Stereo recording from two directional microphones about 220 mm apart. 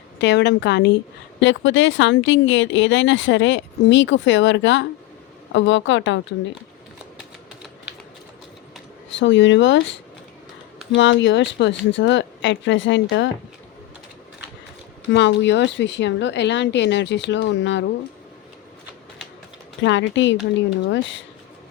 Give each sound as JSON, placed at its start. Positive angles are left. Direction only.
{"t": 0.2, "sound": "a woman's voice", "side_deg": 50}
{"t": 9.1, "sound": "speech", "side_deg": 55}
{"t": 10.9, "sound": "speech", "side_deg": 55}
{"t": 15.1, "sound": "a woman's voice", "side_deg": 55}
{"t": 19.8, "sound": "speech", "side_deg": 55}